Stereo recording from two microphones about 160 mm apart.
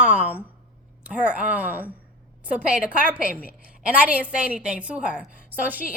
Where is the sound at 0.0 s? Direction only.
5° right (ahead or behind).